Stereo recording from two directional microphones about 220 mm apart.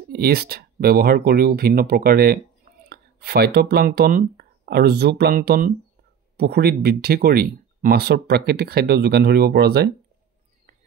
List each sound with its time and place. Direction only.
0.1 s speech: 45° right (ahead or behind)